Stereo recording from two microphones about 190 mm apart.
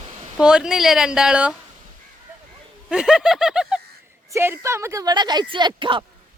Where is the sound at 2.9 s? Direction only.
5° right (ahead or behind); by 6.0 s 25° right (ahead or behind).